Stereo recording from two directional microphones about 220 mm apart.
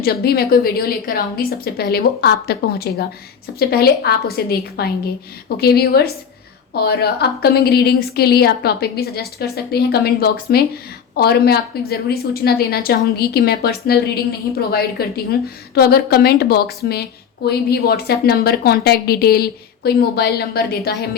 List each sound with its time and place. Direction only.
0.0 s a woman's voice: 45° left (ahead or behind)